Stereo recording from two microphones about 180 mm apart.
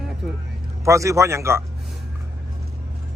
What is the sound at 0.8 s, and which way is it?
Speech, 15° right (ahead or behind).